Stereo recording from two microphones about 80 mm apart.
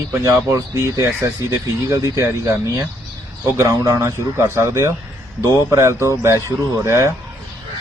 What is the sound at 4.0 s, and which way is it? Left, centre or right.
A man's voice, right.